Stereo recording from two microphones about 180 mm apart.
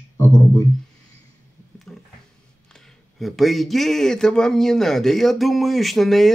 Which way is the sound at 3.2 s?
Centre (ahead or behind).